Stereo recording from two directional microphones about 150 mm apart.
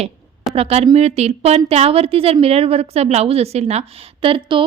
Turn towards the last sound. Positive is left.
turn(degrees=-35)  # may be behind; listen again after turning